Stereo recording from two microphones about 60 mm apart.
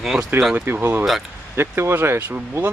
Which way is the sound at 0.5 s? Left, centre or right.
Right.